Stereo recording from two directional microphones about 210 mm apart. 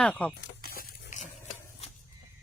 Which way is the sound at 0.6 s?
45° left (ahead or behind).